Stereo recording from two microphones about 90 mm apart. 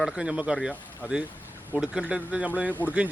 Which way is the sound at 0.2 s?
10° right (ahead or behind).